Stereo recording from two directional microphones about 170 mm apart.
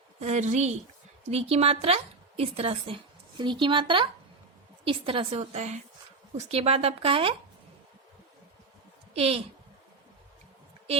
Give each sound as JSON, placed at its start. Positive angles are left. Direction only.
{"t": 0.2, "sound": "a woman's voice", "side_deg": -40}
{"t": 9.1, "sound": "a woman's voice", "side_deg": -35}